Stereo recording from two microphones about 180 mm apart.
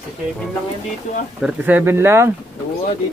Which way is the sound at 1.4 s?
10° right (ahead or behind).